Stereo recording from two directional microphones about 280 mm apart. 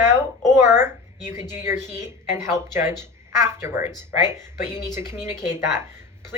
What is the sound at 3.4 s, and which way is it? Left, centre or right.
Speech, centre.